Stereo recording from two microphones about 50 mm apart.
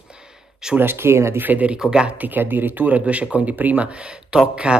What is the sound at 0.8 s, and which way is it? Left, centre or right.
Speech, right.